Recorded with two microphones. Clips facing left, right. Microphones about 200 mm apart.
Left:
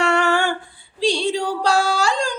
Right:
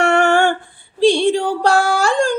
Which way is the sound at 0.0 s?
50° right (ahead or behind).